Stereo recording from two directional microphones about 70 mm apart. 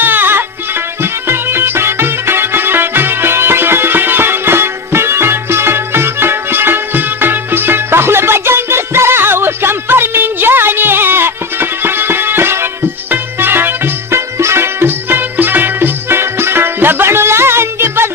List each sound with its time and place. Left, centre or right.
0.0 s music: right